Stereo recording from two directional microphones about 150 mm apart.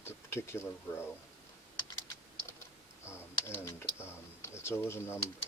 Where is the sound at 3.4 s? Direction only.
15° left (ahead or behind).